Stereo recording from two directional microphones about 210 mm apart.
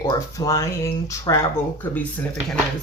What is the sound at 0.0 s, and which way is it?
Speech, 15° left (ahead or behind).